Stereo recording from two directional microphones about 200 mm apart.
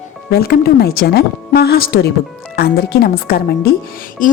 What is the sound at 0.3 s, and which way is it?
A woman's voice, 50° left (ahead or behind).